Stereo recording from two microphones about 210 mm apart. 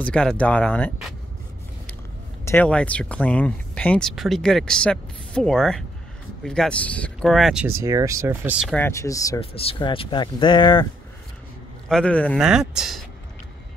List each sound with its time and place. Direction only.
0.0 s speech: 5° left (ahead or behind)
2.4 s speech: 10° left (ahead or behind)
7.8 s speech: 15° right (ahead or behind)
8.7 s speech: 10° left (ahead or behind)
9.4 s speech: 25° left (ahead or behind)
11.9 s speech: 5° left (ahead or behind)